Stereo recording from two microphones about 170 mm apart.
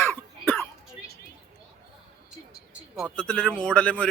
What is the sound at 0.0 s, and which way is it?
Cough, 10° left (ahead or behind).